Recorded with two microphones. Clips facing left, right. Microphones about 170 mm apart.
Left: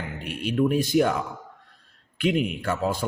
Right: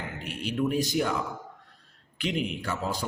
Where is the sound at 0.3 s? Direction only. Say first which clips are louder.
Left 5 dB; 55° left (ahead or behind).